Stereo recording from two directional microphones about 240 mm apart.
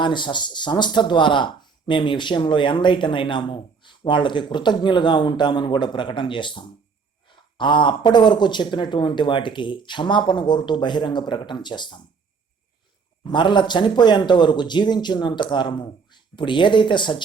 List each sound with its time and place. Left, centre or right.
0.0 s speech: centre
13.2 s speech: centre